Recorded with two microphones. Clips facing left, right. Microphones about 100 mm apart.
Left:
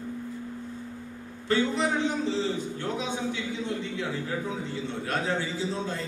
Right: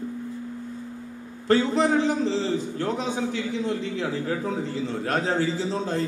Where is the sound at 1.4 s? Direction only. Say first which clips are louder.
Right 5 dB; 40° right (ahead or behind).